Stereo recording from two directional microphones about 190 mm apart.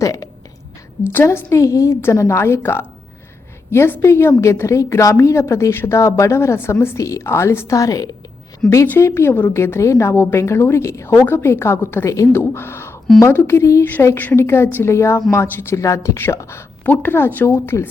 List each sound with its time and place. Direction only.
0.0 s a woman's voice: 15° left (ahead or behind)